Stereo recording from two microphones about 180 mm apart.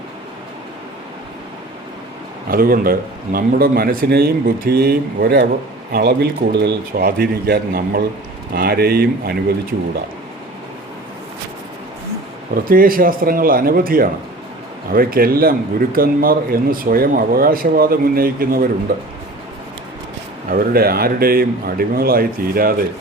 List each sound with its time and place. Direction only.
2.5 s speech: 55° right (ahead or behind)
12.5 s speech: 55° right (ahead or behind)
20.5 s speech: 55° right (ahead or behind)